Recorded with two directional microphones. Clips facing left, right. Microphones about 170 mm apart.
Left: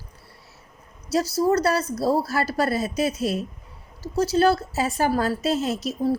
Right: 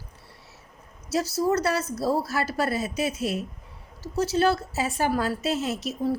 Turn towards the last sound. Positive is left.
turn(degrees=35)  # may be behind; listen again after turning